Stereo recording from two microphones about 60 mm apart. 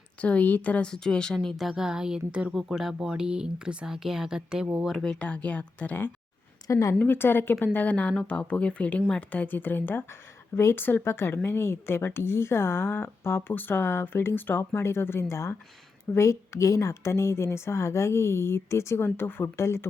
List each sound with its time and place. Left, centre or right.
0.2 s speech: left
0.9 s speech: centre
1.5 s speech: centre
2.6 s speech: centre
5.0 s speech: centre
6.7 s a woman's voice: left
7.1 s speech: left
14.6 s a woman's voice: left